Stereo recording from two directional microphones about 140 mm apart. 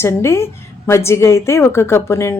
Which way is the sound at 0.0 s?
20° left (ahead or behind).